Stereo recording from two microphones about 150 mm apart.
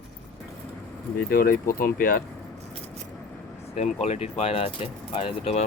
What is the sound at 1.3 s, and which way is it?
Speech, 75° left (ahead or behind).